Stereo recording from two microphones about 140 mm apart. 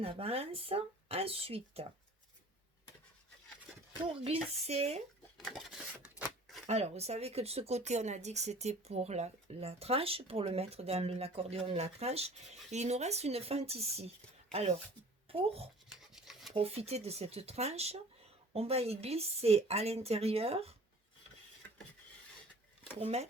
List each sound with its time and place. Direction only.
0.0 s speech: 45° right (ahead or behind)
4.2 s speech: 45° right (ahead or behind)
5.4 s a sound: centre (ahead or behind)
6.7 s speech: 50° right (ahead or behind)
15.3 s speech: 45° right (ahead or behind)
16.0 s rub: centre (ahead or behind)
16.6 s speech: 45° right (ahead or behind)
23.0 s speech: 50° right (ahead or behind)